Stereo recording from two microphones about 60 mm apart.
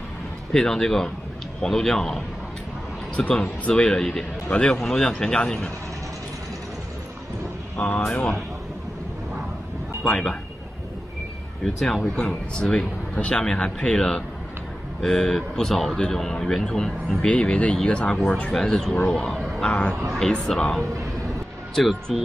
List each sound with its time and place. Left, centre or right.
0.5 s speech: centre
3.2 s speech: centre
4.5 s a man's voice: centre
7.7 s speech: centre
10.0 s speech: centre
11.6 s speech: centre
13.1 s speech: centre
18.5 s speech: centre